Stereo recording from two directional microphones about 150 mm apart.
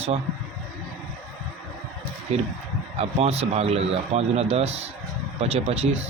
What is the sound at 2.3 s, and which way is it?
Speech, 45° right (ahead or behind).